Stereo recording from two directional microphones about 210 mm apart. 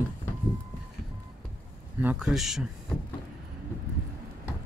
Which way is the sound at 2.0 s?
Centre (ahead or behind).